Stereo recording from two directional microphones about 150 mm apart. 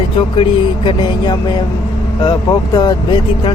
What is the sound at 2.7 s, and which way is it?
Speech, 30° left (ahead or behind).